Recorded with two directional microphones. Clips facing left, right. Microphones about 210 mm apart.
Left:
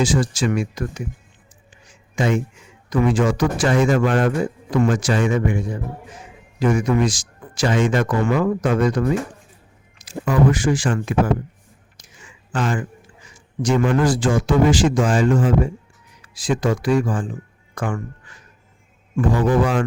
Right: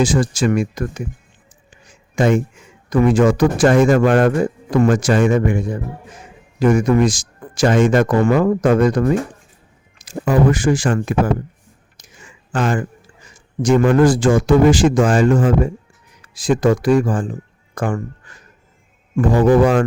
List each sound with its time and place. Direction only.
0.0 s speech: 50° right (ahead or behind)
2.1 s speech: 50° right (ahead or behind)
12.5 s speech: 50° right (ahead or behind)
19.3 s speech: 45° right (ahead or behind)